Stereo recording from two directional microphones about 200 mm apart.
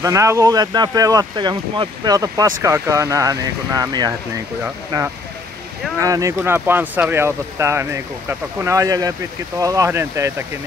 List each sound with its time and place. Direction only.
0.0 s speech: 15° right (ahead or behind)